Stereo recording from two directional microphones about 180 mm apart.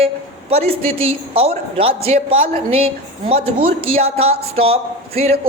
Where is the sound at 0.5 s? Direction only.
35° right (ahead or behind).